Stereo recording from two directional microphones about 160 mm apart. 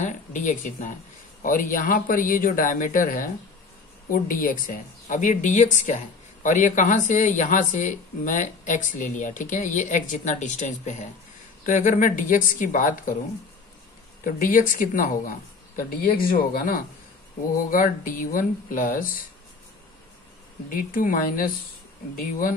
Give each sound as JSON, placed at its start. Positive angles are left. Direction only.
{"t": 0.0, "sound": "a woman's voice", "side_deg": 50}
{"t": 14.2, "sound": "speech", "side_deg": 55}
{"t": 20.7, "sound": "speech", "side_deg": 60}